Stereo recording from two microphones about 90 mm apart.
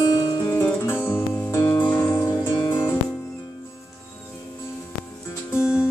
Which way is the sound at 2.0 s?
45° left (ahead or behind).